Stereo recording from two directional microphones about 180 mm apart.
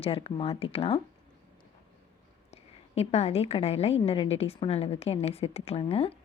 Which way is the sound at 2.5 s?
35° left (ahead or behind).